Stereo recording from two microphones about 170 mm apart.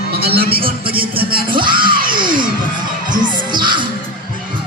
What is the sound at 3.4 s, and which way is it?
Music, 25° right (ahead or behind).